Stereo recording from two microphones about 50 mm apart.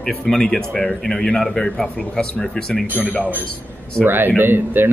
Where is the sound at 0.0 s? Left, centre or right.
Centre.